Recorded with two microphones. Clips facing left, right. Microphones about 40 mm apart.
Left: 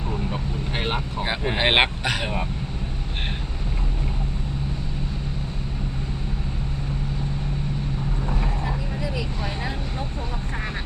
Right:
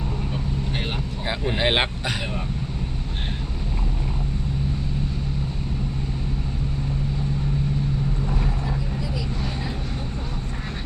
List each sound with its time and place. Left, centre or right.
0.8 s vehicle: left
8.3 s vehicle: centre